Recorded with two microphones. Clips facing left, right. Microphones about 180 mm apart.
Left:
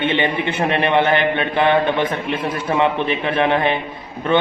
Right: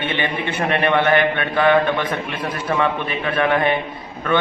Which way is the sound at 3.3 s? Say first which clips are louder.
Even; 25° left (ahead or behind).